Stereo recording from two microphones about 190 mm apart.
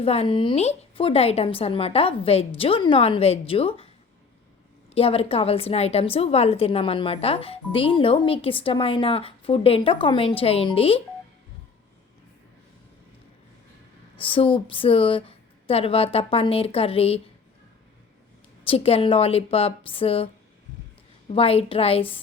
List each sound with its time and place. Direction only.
0.0 s a woman's voice: 30° left (ahead or behind)
4.9 s a woman's voice: 30° left (ahead or behind)
14.3 s a woman's voice: 25° left (ahead or behind)
18.6 s a woman's voice: 30° left (ahead or behind)